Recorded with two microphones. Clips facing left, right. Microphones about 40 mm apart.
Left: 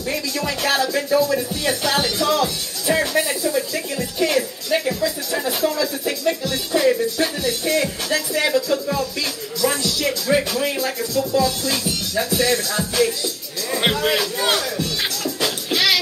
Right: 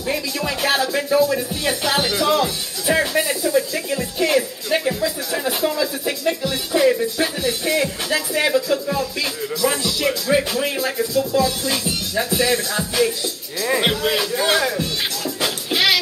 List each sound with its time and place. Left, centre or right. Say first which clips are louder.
0.0 s speech: right 1 dB; centre
8.9 s music: right 1 dB; centre
13.7 s music: left 2 dB; centre
14.6 s music: right 2 dB; centre